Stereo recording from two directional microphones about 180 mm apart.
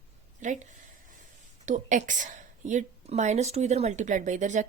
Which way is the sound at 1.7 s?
45° right (ahead or behind).